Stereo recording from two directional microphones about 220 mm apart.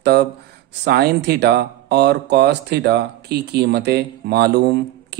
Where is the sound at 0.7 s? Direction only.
50° right (ahead or behind).